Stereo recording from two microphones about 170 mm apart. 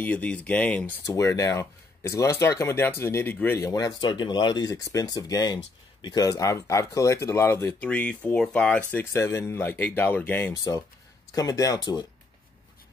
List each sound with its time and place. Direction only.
0.0 s speech: 10° left (ahead or behind); by 12.1 s 25° left (ahead or behind)